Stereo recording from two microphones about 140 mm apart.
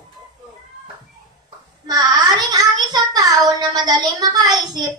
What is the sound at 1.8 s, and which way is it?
A child's voice, 30° right (ahead or behind).